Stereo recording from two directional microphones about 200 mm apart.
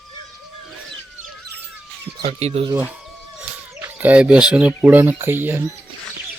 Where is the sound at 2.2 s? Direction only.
30° right (ahead or behind).